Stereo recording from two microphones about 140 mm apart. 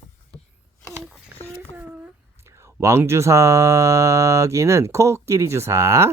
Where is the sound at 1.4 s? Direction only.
15° right (ahead or behind).